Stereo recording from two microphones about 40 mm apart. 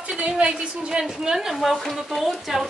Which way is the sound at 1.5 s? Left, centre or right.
Centre.